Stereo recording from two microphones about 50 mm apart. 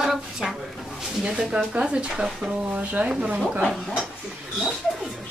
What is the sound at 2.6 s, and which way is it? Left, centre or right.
Speech, right.